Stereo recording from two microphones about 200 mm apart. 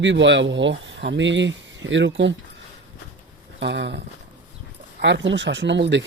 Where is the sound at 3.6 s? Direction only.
60° right (ahead or behind).